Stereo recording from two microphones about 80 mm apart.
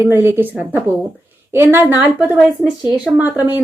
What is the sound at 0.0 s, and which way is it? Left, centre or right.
A woman's voice, right.